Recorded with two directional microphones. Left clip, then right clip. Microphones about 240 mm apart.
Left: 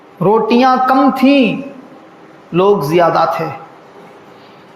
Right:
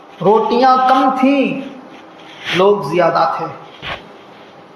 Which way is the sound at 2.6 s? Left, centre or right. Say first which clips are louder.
Left 2 dB; left.